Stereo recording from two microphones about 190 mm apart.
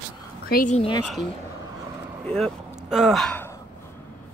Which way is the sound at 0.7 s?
30° left (ahead or behind).